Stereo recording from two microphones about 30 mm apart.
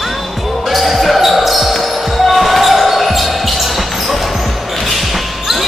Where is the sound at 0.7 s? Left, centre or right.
Centre.